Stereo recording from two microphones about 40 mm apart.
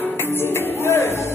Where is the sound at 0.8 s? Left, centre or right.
Left.